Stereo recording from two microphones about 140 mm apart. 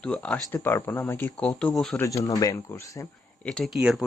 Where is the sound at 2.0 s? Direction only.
25° left (ahead or behind).